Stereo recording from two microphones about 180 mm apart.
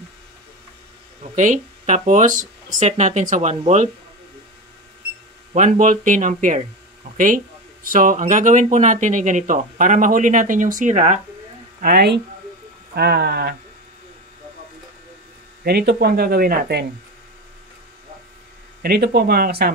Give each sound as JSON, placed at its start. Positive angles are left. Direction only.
{"t": 1.3, "sound": "speech", "side_deg": -45}
{"t": 5.5, "sound": "speech", "side_deg": -45}
{"t": 11.8, "sound": "speech", "side_deg": -60}
{"t": 15.6, "sound": "speech", "side_deg": -65}
{"t": 18.8, "sound": "speech", "side_deg": -60}